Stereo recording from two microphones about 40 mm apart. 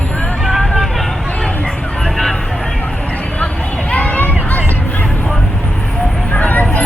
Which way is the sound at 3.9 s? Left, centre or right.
Left.